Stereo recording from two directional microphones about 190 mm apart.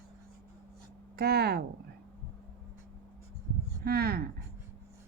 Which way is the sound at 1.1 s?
55° right (ahead or behind).